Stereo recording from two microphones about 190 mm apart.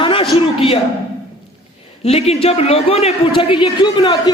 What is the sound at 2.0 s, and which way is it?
A man's voice, 35° left (ahead or behind).